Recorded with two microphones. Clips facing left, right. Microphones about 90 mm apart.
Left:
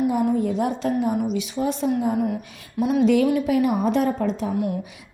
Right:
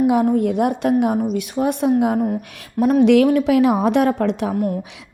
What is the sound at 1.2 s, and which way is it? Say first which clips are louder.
A woman's voice: right 4 dB; 50° right (ahead or behind).